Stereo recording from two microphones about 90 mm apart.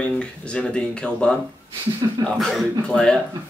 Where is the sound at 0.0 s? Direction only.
10° left (ahead or behind).